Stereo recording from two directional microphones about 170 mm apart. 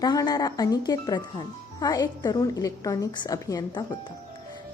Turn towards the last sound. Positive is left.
turn(degrees=25)  # may be behind; listen again after turning